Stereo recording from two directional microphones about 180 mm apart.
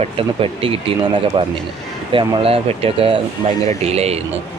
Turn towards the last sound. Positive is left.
turn(degrees=-35)  # may be behind; listen again after turning